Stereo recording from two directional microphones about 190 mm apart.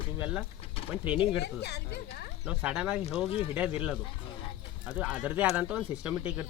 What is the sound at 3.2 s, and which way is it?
Speech, 30° left (ahead or behind).